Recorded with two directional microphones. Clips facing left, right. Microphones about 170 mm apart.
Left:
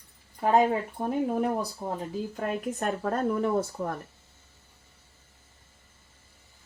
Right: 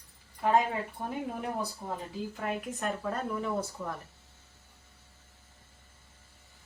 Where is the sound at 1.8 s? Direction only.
40° left (ahead or behind).